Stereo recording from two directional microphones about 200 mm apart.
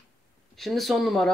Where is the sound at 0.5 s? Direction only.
Centre (ahead or behind).